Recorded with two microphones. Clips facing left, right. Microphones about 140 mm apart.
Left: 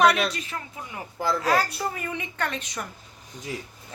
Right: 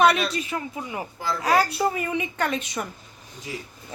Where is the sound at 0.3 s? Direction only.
10° right (ahead or behind).